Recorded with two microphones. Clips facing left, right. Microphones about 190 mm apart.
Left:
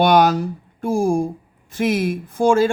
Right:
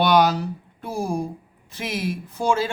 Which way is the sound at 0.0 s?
50° left (ahead or behind).